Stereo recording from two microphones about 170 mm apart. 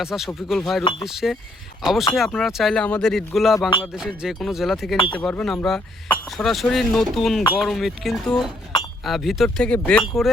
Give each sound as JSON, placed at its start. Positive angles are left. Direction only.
{"t": 0.0, "sound": "speech", "side_deg": 0}
{"t": 4.9, "sound": "speech", "side_deg": 30}
{"t": 5.2, "sound": "speech", "side_deg": 5}